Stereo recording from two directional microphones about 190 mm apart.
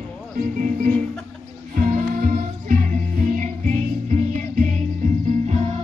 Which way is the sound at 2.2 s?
45° right (ahead or behind).